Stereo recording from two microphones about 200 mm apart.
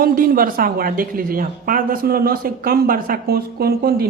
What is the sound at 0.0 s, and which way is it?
A woman's voice, 45° right (ahead or behind).